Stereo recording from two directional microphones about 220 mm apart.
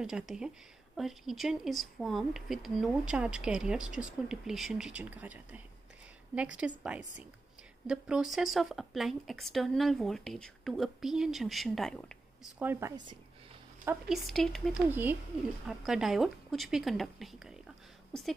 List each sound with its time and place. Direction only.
0.0 s speech: 5° right (ahead or behind)
12.5 s speech: 10° right (ahead or behind)
13.8 s a woman's voice: centre (ahead or behind)